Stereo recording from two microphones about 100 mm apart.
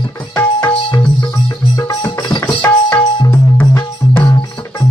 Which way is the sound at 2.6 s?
15° left (ahead or behind).